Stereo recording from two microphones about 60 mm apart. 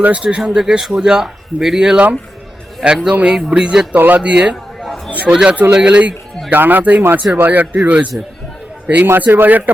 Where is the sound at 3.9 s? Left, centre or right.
Right.